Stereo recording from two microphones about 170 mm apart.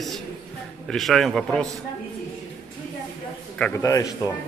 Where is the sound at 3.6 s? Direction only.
15° left (ahead or behind).